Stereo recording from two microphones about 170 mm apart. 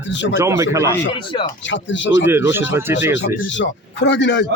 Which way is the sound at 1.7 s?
90° left.